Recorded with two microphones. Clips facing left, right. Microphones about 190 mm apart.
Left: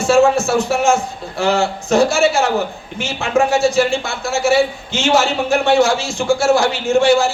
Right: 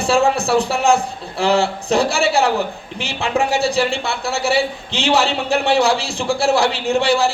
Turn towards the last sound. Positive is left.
turn(degrees=-35)  # may be behind; listen again after turning